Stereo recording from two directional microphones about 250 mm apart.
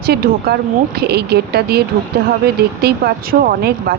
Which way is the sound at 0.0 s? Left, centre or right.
Right.